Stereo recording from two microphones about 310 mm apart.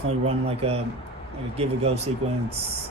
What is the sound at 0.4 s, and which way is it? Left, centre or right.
Speech, centre.